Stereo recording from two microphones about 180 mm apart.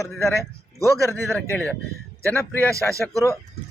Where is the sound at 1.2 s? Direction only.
15° left (ahead or behind).